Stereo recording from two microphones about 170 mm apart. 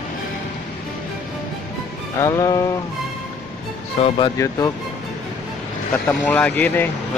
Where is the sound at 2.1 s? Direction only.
20° left (ahead or behind).